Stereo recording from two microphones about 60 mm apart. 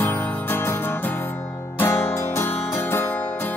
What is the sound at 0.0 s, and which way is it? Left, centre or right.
Music, left.